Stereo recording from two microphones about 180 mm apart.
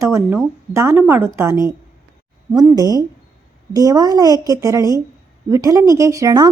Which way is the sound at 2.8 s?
20° right (ahead or behind).